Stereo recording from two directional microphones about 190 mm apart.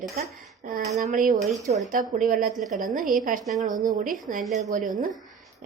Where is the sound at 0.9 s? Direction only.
40° right (ahead or behind).